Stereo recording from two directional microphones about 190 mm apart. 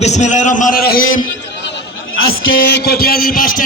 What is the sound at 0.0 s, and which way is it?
A man's voice, 40° left (ahead or behind).